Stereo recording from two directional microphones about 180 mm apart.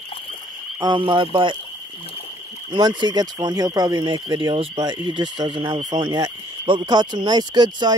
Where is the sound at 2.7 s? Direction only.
25° right (ahead or behind).